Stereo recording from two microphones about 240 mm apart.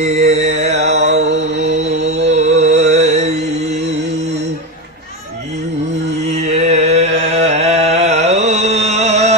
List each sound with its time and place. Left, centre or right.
0.0 s mantra: right
1.2 s mantra: right
1.6 s mantra: right
6.3 s a sound: right